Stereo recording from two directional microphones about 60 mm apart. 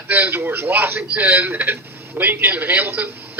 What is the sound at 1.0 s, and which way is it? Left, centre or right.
A man's voice, right.